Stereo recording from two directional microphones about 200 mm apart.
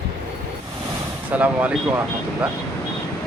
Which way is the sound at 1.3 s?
10° right (ahead or behind).